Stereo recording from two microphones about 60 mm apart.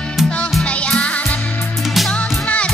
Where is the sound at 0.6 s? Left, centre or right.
Centre.